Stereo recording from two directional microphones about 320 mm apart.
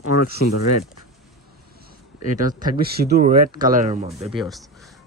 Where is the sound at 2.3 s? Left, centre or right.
Right.